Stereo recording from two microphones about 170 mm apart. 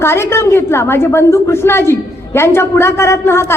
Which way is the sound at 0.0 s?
15° left (ahead or behind).